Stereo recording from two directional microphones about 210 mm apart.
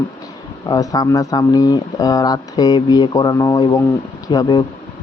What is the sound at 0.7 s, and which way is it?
Speech, 15° left (ahead or behind).